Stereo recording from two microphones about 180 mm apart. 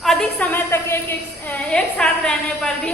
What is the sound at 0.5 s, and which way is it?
A woman's voice, 15° left (ahead or behind).